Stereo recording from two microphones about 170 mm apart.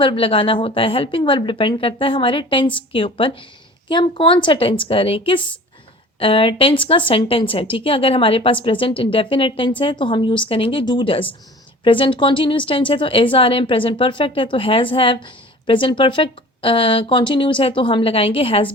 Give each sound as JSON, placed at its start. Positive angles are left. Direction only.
{"t": 0.0, "sound": "speech", "side_deg": 30}